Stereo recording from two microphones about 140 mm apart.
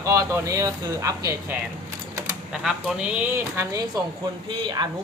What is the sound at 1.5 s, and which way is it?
Speech, 15° right (ahead or behind).